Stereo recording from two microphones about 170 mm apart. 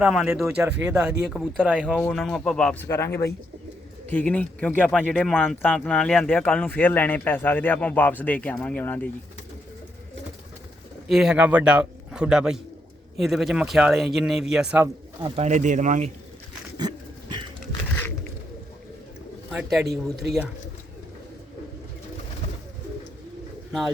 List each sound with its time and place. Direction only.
0.0 s speech: 5° right (ahead or behind)
2.0 s speech: 5° left (ahead or behind)
2.8 s speech: 15° left (ahead or behind)
5.3 s speech: 5° right (ahead or behind)
5.6 s speech: 5° left (ahead or behind)
11.1 s speech: 5° right (ahead or behind)
15.2 s speech: 40° right (ahead or behind)
16.7 s dog: 25° right (ahead or behind)